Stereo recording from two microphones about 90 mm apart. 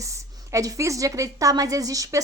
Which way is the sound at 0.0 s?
35° right (ahead or behind).